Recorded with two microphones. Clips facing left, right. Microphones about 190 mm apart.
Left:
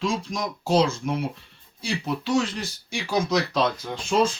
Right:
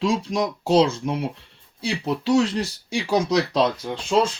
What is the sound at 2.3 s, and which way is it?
Speech, 35° right (ahead or behind).